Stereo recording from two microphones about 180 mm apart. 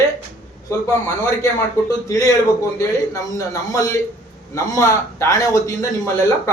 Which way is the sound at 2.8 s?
20° left (ahead or behind).